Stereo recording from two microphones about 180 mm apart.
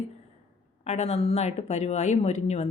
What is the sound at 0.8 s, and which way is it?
Speech, 35° left (ahead or behind).